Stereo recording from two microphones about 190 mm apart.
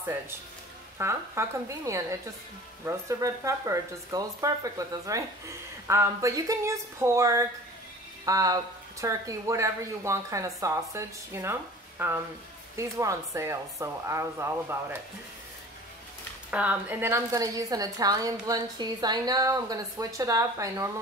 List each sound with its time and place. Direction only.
0.9 s a woman's voice: 15° right (ahead or behind)
16.4 s a woman's voice: 5° right (ahead or behind)